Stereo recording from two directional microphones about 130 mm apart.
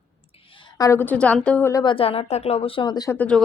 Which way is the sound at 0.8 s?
20° left (ahead or behind).